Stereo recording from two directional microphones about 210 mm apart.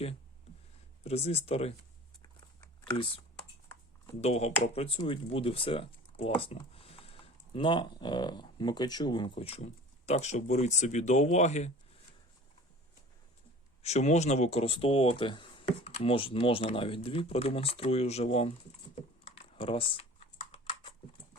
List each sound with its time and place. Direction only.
1.0 s speech: 30° left (ahead or behind)
4.2 s speech: 30° left (ahead or behind)
13.8 s speech: 30° left (ahead or behind)
19.3 s typing: 25° left (ahead or behind)